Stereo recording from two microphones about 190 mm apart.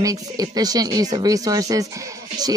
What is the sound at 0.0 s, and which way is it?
Speech, 20° right (ahead or behind).